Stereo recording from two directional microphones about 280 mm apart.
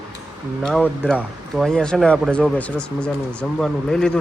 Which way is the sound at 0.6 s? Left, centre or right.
Centre.